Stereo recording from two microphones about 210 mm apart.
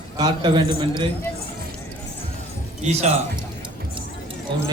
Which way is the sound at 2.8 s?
30° right (ahead or behind).